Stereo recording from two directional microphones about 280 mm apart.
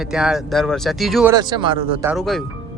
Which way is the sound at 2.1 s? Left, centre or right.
Centre.